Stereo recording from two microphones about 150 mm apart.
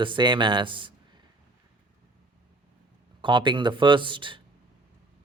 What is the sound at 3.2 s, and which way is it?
Speech, 30° right (ahead or behind).